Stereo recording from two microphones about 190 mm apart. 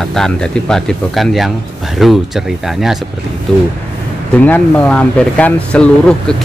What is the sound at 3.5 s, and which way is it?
Speech, 5° left (ahead or behind).